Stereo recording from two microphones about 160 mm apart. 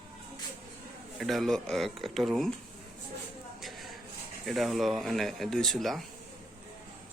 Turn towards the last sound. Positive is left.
turn(degrees=0)  # may be behind; listen again after turning